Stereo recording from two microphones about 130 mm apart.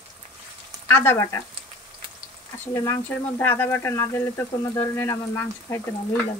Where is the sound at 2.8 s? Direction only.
20° left (ahead or behind).